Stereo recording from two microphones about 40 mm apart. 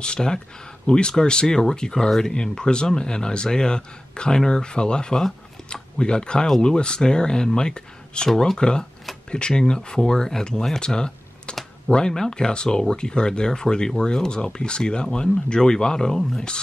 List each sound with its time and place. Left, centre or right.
0.0 s speech: centre